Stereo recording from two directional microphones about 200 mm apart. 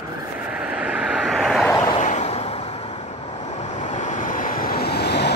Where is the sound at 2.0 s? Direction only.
35° left (ahead or behind).